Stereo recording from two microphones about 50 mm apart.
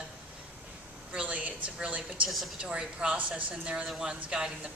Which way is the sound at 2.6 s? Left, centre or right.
Right.